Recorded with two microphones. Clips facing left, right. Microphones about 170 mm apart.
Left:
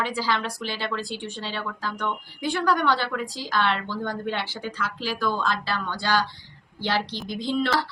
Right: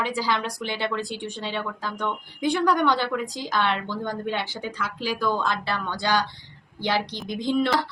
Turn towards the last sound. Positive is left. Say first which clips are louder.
# right 2 dB
turn(degrees=-15)  # may be behind; listen again after turning